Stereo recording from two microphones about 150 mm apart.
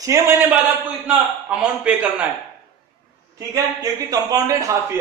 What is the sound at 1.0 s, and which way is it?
A man's voice, 5° right (ahead or behind).